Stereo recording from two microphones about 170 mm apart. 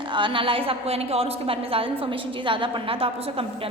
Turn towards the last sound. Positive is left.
turn(degrees=-35)  # may be behind; listen again after turning